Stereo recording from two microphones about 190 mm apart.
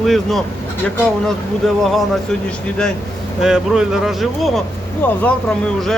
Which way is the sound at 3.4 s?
5° right (ahead or behind).